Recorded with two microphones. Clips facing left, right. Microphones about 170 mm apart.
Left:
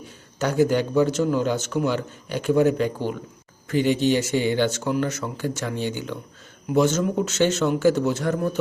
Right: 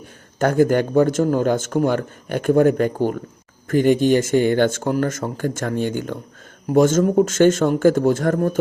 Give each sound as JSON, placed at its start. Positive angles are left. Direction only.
{"t": 0.3, "sound": "speech", "side_deg": -50}